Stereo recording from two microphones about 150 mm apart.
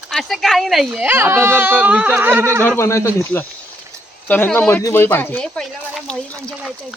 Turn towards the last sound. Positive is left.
turn(degrees=5)  # may be behind; listen again after turning